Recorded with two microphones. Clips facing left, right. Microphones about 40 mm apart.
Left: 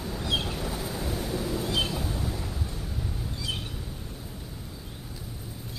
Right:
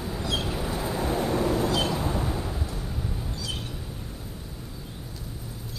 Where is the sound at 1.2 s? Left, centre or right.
Right.